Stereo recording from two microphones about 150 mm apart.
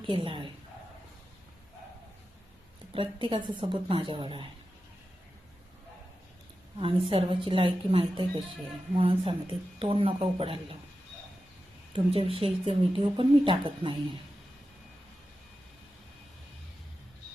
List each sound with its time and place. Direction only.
0.0 s speech: 35° right (ahead or behind)
2.9 s speech: 35° right (ahead or behind)
6.7 s speech: 35° right (ahead or behind)
11.9 s speech: 35° right (ahead or behind)